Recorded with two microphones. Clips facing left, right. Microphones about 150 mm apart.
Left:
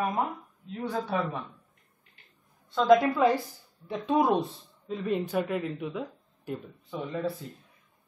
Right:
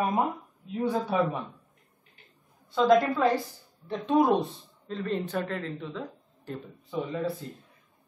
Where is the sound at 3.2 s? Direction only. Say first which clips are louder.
Left 1 dB; 10° left (ahead or behind).